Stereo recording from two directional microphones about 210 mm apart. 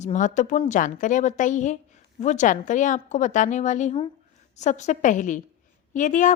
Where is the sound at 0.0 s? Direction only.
35° left (ahead or behind).